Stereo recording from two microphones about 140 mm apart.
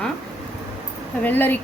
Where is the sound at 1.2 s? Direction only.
15° left (ahead or behind).